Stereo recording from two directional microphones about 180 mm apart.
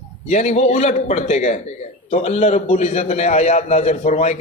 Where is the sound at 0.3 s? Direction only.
40° left (ahead or behind).